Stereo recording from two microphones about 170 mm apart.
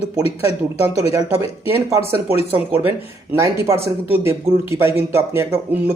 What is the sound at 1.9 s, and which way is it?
Speech, 15° right (ahead or behind).